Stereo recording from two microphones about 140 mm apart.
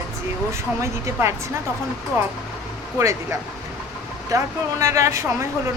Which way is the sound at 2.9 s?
20° right (ahead or behind).